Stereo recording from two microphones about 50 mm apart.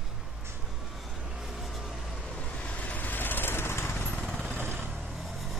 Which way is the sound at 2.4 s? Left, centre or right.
Left.